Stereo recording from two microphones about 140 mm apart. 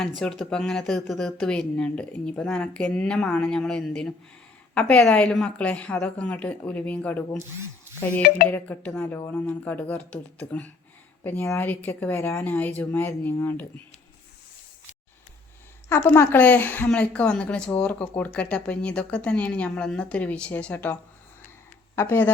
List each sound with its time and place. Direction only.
0.2 s speech: 5° left (ahead or behind)
8.4 s speech: 10° left (ahead or behind)
15.9 s speech: 20° left (ahead or behind)